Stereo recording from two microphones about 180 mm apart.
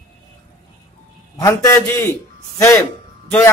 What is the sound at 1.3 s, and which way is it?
A man's voice, 20° left (ahead or behind).